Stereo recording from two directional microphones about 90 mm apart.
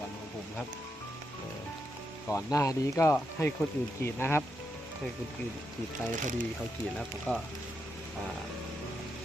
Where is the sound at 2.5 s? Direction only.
35° left (ahead or behind).